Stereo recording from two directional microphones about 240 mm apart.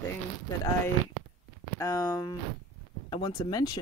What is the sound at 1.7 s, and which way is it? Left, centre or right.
Speech, centre.